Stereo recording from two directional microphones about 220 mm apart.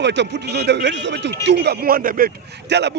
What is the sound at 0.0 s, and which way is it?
Speech, 50° right (ahead or behind).